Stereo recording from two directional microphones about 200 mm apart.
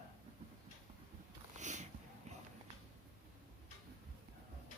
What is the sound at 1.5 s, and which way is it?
Sniff, 35° right (ahead or behind).